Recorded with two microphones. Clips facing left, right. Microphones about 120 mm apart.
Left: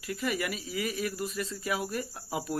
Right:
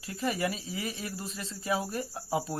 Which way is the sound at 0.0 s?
30° right (ahead or behind).